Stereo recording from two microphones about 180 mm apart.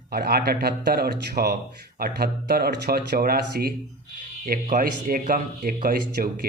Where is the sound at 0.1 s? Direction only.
60° right (ahead or behind).